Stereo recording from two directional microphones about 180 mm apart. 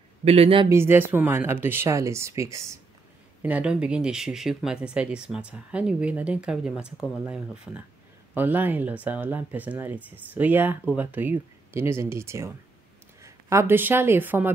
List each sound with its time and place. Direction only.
0.2 s speech: 35° right (ahead or behind)
0.7 s speech: 15° right (ahead or behind)